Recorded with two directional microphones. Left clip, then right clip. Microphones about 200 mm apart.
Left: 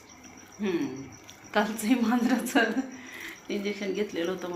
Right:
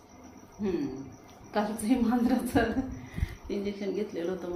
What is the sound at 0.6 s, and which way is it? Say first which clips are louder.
A woman's voice: left 2 dB; 10° left (ahead or behind).